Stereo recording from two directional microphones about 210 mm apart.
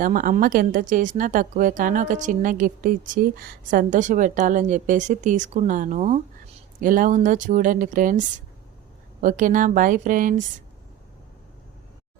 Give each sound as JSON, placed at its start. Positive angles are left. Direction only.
{"t": 0.0, "sound": "a woman's voice", "side_deg": -40}
{"t": 9.2, "sound": "a woman's voice", "side_deg": -40}